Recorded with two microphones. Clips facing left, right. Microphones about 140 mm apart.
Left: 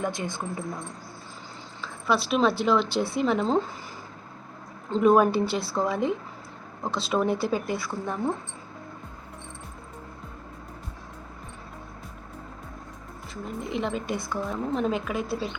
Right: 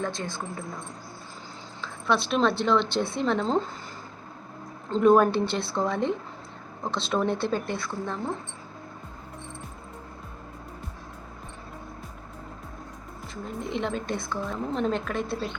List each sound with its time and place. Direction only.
0.0 s a woman's voice: 15° left (ahead or behind)
1.8 s a woman's voice: 5° left (ahead or behind)
4.9 s a woman's voice: 5° left (ahead or behind)
13.3 s a woman's voice: 5° left (ahead or behind)